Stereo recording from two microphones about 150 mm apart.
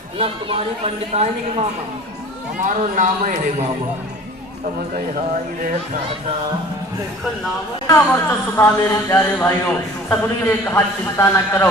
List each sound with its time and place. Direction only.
0.2 s speech: 40° right (ahead or behind)
2.6 s speech: 60° right (ahead or behind)
7.9 s speech: 15° left (ahead or behind)